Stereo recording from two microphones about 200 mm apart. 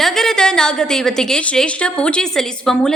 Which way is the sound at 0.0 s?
Centre (ahead or behind).